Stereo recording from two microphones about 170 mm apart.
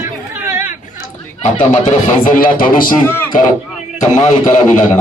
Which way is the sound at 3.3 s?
50° left (ahead or behind).